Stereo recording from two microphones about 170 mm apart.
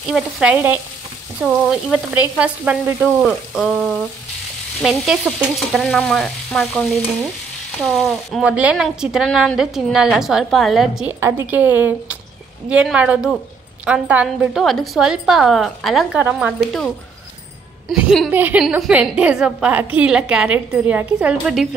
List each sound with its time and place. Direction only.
0.1 s a woman's voice: 5° right (ahead or behind)
11.1 s a woman's voice: 15° right (ahead or behind)
17.8 s a woman's voice: centre (ahead or behind)
18.3 s a woman's voice: 10° right (ahead or behind)